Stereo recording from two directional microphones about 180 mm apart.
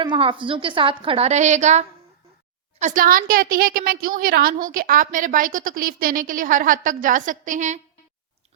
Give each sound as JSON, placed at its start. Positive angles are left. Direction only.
{"t": 0.0, "sound": "a woman's voice", "side_deg": -30}